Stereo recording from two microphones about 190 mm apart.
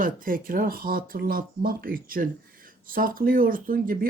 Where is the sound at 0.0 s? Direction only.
45° right (ahead or behind).